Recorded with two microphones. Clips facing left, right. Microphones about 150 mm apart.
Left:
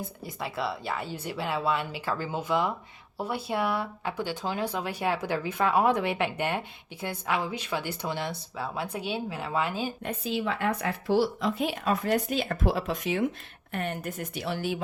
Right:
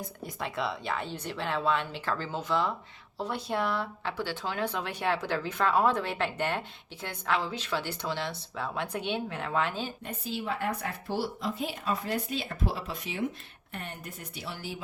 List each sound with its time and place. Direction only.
0.0 s speech: centre (ahead or behind)
10.0 s a woman's voice: 90° left; by 14.8 s 70° left (ahead or behind)